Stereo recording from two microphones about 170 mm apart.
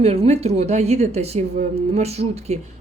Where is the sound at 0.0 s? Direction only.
35° right (ahead or behind).